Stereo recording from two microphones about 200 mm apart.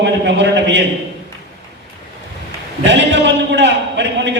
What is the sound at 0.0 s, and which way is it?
Speech, 60° right (ahead or behind).